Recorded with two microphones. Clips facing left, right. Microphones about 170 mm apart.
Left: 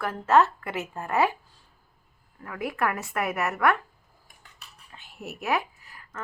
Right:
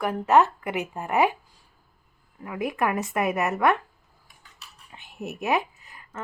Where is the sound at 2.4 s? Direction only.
20° right (ahead or behind).